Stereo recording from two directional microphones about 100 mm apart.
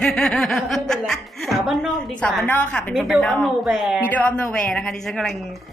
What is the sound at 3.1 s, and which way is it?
Speech, 5° left (ahead or behind).